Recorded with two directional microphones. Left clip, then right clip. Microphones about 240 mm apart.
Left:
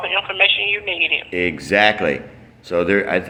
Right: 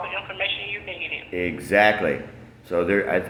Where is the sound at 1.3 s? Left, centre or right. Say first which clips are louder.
Left 4 dB; left.